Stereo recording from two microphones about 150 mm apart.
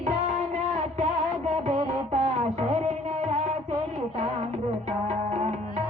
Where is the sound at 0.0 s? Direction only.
50° right (ahead or behind).